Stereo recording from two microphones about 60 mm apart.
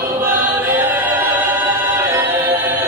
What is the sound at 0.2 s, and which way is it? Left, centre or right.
Choir, right.